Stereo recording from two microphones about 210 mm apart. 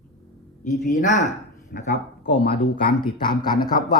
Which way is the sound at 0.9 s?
35° left (ahead or behind).